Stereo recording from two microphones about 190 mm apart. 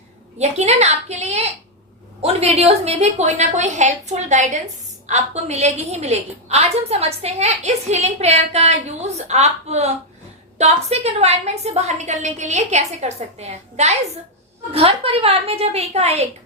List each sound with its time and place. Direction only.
0.3 s a woman's voice: 35° right (ahead or behind)